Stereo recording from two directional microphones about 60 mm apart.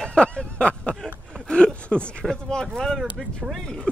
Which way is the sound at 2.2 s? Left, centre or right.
Centre.